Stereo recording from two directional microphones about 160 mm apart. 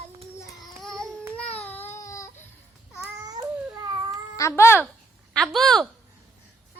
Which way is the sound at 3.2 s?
25° right (ahead or behind).